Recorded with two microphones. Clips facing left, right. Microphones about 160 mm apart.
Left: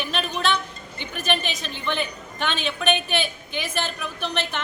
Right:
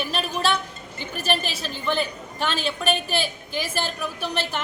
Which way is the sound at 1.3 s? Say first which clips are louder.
Even; 35° right (ahead or behind).